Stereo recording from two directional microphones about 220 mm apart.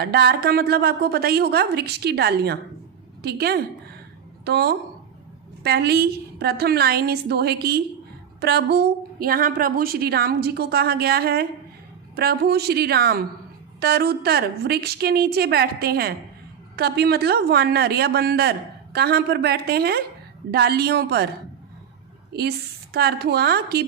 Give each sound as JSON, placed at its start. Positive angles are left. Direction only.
{"t": 0.0, "sound": "a woman's voice", "side_deg": -45}
{"t": 22.3, "sound": "a woman's voice", "side_deg": -45}